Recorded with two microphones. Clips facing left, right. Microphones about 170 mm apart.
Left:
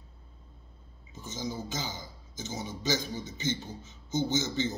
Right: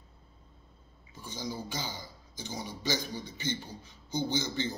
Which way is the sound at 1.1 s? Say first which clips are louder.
Left 3 dB; 20° left (ahead or behind).